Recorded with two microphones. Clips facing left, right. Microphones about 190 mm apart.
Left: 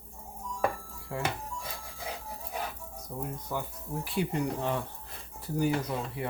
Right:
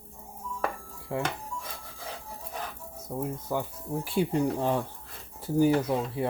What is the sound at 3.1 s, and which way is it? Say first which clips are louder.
Speech: right 5 dB; 35° right (ahead or behind).